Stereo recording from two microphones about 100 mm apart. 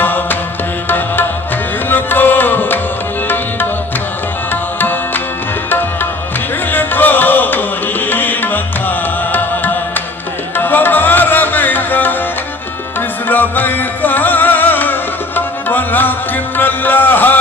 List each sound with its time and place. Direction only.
0.0 s music: 20° left (ahead or behind)
1.9 s tabla: 20° left (ahead or behind)
4.5 s music: 20° left (ahead or behind)
6.7 s music: 20° left (ahead or behind)
13.3 s music: 20° left (ahead or behind)